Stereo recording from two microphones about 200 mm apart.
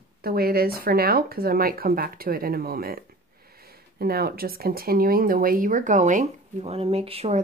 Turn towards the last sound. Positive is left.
turn(degrees=-30)  # may be behind; listen again after turning